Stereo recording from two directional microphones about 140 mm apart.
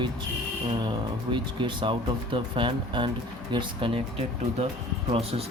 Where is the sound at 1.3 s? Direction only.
35° right (ahead or behind).